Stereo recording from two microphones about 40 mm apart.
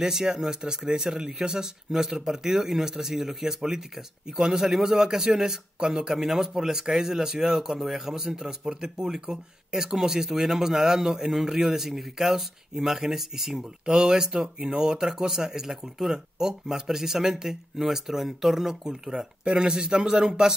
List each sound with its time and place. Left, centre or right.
0.0 s speech: centre
8.8 s speech: right
9.1 s speech: centre
13.8 s speech: centre